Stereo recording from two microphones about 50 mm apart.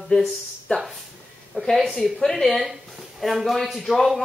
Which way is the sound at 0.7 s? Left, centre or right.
Left.